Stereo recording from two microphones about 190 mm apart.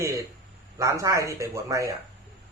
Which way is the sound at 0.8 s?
15° right (ahead or behind).